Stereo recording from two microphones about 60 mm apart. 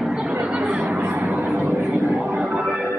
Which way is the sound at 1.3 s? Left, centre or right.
Right.